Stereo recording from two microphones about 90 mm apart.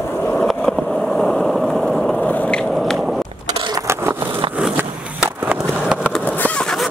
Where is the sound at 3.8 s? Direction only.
30° right (ahead or behind).